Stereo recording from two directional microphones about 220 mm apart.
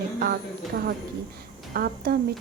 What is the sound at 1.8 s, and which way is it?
Speech, 45° right (ahead or behind).